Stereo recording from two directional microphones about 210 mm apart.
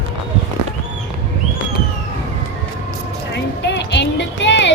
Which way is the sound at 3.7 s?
55° left (ahead or behind).